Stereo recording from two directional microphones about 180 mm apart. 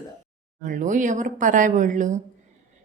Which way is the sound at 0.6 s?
45° right (ahead or behind).